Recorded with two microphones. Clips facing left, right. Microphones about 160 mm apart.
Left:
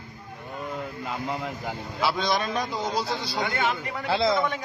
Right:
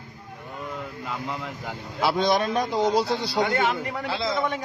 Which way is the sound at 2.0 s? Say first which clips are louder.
Right 4 dB; 55° right (ahead or behind).